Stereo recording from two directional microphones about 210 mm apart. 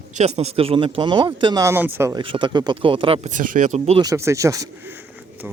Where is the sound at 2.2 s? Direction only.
25° right (ahead or behind).